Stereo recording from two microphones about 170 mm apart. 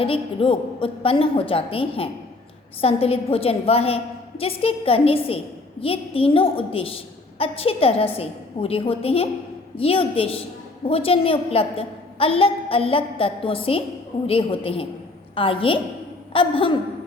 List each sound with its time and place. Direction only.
0.0 s a woman's voice: 30° left (ahead or behind)